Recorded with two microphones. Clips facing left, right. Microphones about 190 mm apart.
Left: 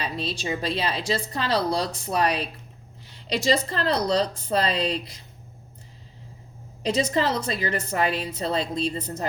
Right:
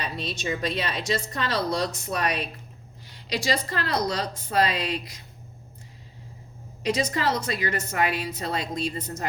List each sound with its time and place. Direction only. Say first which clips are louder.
0.0 s speech: left 2 dB; 30° left (ahead or behind)
3.8 s speech: left 4 dB; 35° left (ahead or behind)
6.8 s speech: left 2 dB; 30° left (ahead or behind)